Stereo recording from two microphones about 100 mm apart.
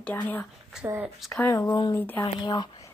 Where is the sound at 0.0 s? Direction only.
20° left (ahead or behind).